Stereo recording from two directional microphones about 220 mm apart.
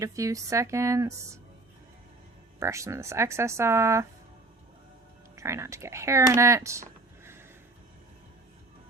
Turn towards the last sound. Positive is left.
turn(degrees=-10)  # may be behind; listen again after turning